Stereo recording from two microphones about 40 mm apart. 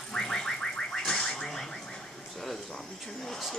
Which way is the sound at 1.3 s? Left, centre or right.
Centre.